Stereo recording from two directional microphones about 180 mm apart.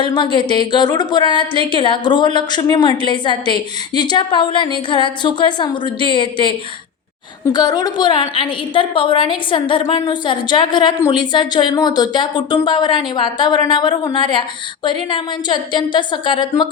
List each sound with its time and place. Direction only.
0.0 s a woman's voice: 25° left (ahead or behind)
7.5 s a woman's voice: 25° left (ahead or behind)